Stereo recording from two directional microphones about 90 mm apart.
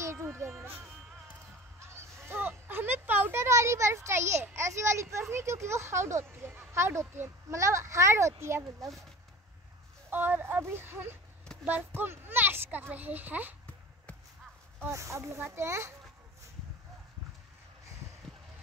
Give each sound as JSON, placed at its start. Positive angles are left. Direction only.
{"t": 0.0, "sound": "music", "side_deg": -30}
{"t": 1.8, "sound": "a sound", "side_deg": -30}
{"t": 5.3, "sound": "speech", "side_deg": -30}
{"t": 10.0, "sound": "a woman's voice", "side_deg": -20}
{"t": 14.9, "sound": "speech", "side_deg": -35}